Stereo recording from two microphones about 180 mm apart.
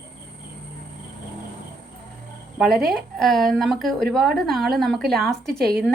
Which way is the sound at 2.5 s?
Centre (ahead or behind).